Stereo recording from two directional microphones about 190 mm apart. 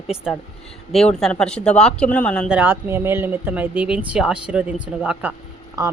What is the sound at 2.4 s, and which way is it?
Speech, 10° right (ahead or behind).